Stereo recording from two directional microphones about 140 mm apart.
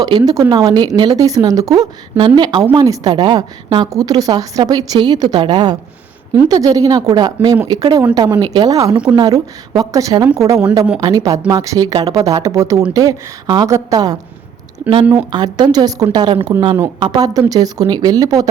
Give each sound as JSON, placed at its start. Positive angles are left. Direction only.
{"t": 0.0, "sound": "a woman's voice", "side_deg": -30}